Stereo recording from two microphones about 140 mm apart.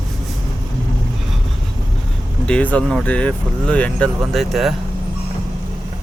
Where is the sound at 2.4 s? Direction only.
10° left (ahead or behind).